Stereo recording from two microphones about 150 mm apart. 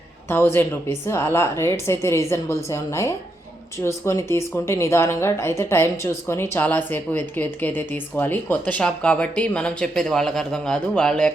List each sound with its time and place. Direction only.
0.3 s speech: 15° left (ahead or behind)